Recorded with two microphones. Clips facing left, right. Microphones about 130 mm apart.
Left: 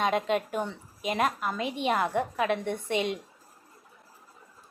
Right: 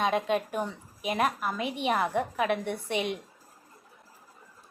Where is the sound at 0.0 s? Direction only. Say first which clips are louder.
Even; centre (ahead or behind).